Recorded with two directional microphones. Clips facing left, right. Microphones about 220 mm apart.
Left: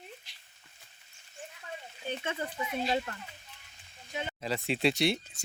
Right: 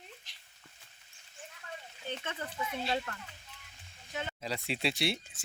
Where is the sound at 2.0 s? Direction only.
10° left (ahead or behind).